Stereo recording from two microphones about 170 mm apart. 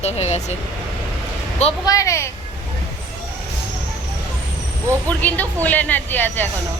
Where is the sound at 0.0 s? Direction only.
40° left (ahead or behind).